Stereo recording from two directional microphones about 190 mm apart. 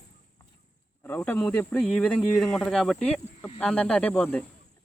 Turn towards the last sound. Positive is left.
turn(degrees=5)  # may be behind; listen again after turning